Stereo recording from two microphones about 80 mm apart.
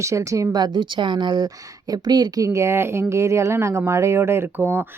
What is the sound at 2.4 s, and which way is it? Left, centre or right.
Speech, right.